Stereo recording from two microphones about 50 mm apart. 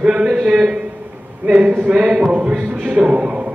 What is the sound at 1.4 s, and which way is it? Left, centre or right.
A man's voice, right.